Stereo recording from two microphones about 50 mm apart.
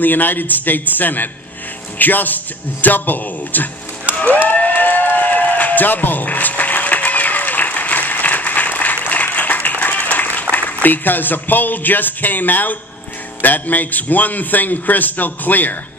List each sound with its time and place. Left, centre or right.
0.0 s a man's voice: left
4.1 s a sound: left
10.5 s a man's voice: left